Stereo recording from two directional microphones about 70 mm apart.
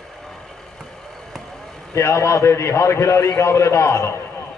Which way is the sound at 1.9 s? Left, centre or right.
Left.